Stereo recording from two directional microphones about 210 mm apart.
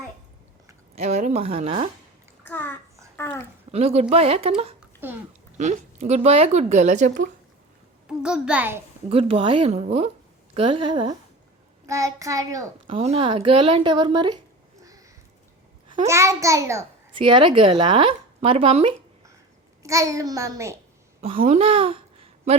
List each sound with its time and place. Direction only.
0.9 s speech: 30° right (ahead or behind)
2.4 s a child's voice: 10° left (ahead or behind)
3.7 s speech: 30° right (ahead or behind)
5.0 s a child's voice: 10° right (ahead or behind)
5.5 s speech: 35° right (ahead or behind)
8.0 s a child's voice: 5° right (ahead or behind)
9.0 s a child's voice: 25° right (ahead or behind)
13.0 s speech: 25° right (ahead or behind)
15.9 s a child's voice: 20° right (ahead or behind)
19.8 s a child's voice: 15° right (ahead or behind)
21.3 s speech: 40° right (ahead or behind)
21.6 s a sound: 25° right (ahead or behind)